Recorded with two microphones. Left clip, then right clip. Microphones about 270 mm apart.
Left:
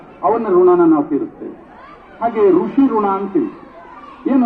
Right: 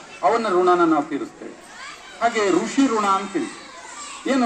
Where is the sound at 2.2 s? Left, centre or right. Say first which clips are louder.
Left 6 dB; right.